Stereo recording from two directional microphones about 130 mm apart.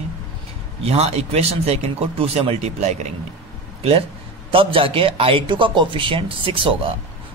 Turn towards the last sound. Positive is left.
turn(degrees=-45)  # may be behind; listen again after turning